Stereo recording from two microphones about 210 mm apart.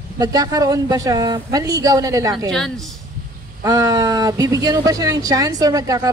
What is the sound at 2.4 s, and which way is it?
Speech, centre (ahead or behind).